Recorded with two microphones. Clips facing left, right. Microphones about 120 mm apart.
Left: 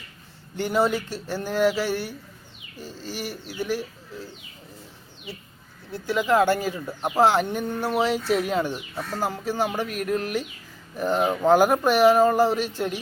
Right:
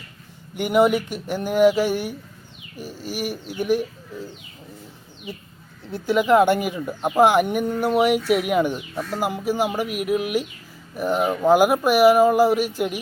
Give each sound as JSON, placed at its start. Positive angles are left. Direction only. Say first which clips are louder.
{"t": 0.5, "sound": "speech", "louder": "right 5 dB", "side_deg": -15}
{"t": 5.9, "sound": "speech", "louder": "right 5 dB", "side_deg": -20}